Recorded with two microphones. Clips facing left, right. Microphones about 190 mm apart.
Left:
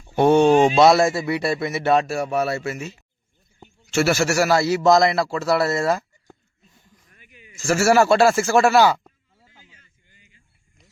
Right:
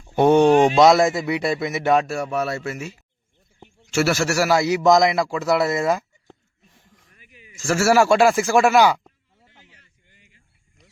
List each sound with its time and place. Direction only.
0.2 s speech: 15° right (ahead or behind)
0.9 s a man's voice: centre (ahead or behind)
1.3 s speech: 15° right (ahead or behind)
2.2 s speech: 35° left (ahead or behind)
2.5 s speech: 10° left (ahead or behind)
2.7 s speech: 10° right (ahead or behind)
3.9 s a man's voice: centre (ahead or behind)
4.5 s speech: 15° right (ahead or behind)
7.5 s speech: centre (ahead or behind); by 9.0 s 15° right (ahead or behind)